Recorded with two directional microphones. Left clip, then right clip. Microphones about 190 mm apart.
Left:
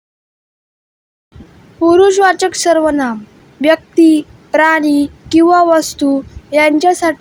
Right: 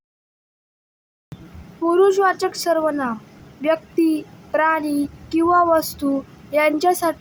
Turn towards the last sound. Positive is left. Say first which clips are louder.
# left 7 dB
turn(degrees=25)  # may be behind; listen again after turning